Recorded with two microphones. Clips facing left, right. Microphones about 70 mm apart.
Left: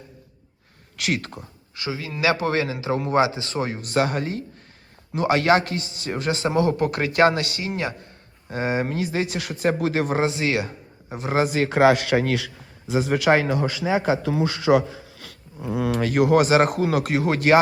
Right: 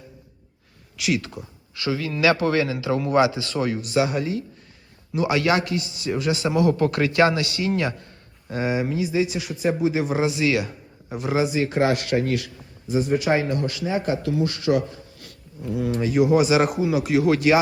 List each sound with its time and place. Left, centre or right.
0.9 s speech: left
1.7 s a man's voice: left
3.8 s a man's voice: left
11.3 s speech: left
14.7 s speech: left
15.9 s speech: left